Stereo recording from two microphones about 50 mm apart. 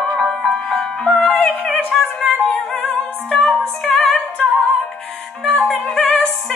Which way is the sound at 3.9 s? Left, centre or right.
Centre.